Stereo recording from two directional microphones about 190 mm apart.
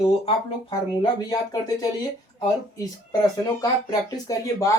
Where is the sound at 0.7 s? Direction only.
20° left (ahead or behind).